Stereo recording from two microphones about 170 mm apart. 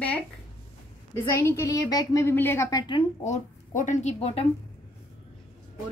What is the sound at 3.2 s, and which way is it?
Speech, 45° left (ahead or behind).